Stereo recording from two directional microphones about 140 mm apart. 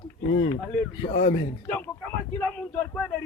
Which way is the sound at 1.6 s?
10° left (ahead or behind).